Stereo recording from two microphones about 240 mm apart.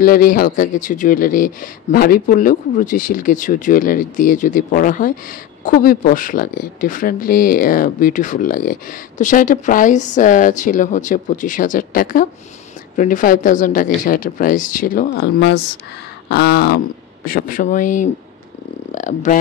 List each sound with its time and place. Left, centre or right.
0.0 s speech: left